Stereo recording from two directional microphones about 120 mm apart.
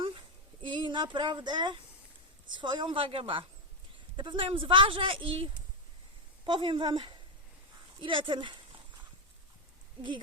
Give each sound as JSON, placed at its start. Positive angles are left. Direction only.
{"t": 0.6, "sound": "speech", "side_deg": -40}